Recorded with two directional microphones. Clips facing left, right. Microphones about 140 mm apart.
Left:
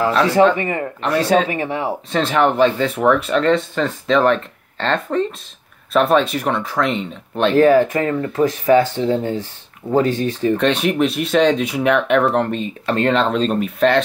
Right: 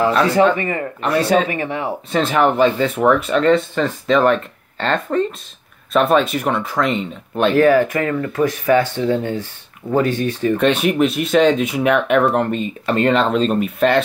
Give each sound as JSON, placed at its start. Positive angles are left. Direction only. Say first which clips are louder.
{"t": 0.6, "sound": "speech", "louder": "even", "side_deg": 20}
{"t": 1.0, "sound": "speech", "louder": "even", "side_deg": -5}
{"t": 1.5, "sound": "speech", "louder": "left 1 dB", "side_deg": 25}
{"t": 2.1, "sound": "speech", "louder": "even", "side_deg": -5}
{"t": 7.5, "sound": "speech", "louder": "left 2 dB", "side_deg": 25}
{"t": 10.6, "sound": "speech", "louder": "right 3 dB", "side_deg": -5}